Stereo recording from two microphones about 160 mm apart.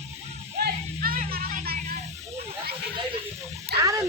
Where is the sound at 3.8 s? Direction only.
20° right (ahead or behind).